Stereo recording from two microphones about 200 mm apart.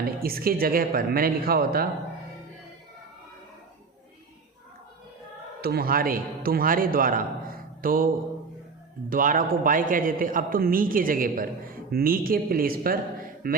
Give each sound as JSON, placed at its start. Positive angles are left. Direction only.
{"t": 0.0, "sound": "a man's voice", "side_deg": -50}
{"t": 5.6, "sound": "a man's voice", "side_deg": -50}